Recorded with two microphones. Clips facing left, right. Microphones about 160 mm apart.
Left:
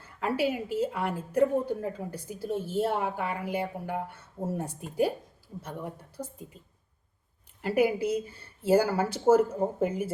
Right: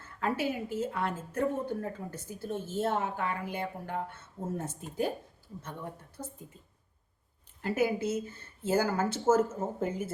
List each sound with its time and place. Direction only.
0.0 s a woman's voice: 15° left (ahead or behind)
7.6 s a woman's voice: 15° left (ahead or behind)